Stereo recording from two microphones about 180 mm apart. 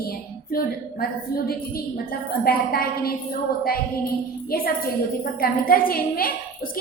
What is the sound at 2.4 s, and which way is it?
Speech, 55° left (ahead or behind).